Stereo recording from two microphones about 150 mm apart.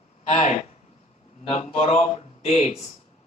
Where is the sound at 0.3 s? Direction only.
50° left (ahead or behind).